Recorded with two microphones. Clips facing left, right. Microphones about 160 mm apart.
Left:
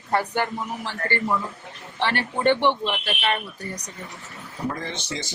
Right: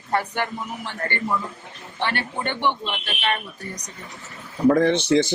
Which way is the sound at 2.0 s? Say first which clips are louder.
Left 4 dB; 35° left (ahead or behind).